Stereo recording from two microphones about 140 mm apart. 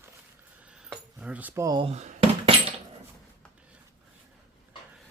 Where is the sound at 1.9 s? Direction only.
50° right (ahead or behind).